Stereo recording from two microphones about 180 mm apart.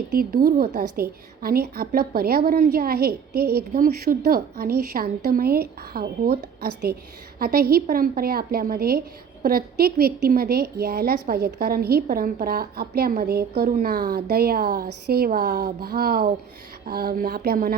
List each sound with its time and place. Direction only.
0.2 s a woman's voice: 55° right (ahead or behind)